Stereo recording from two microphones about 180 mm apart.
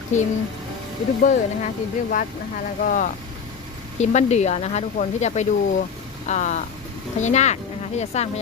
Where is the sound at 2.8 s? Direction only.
50° left (ahead or behind).